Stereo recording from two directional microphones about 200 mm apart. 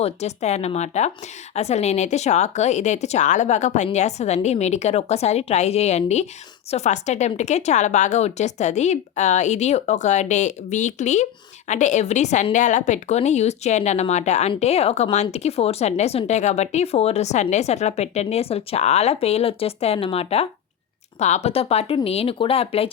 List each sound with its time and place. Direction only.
0.0 s a woman's voice: 35° left (ahead or behind)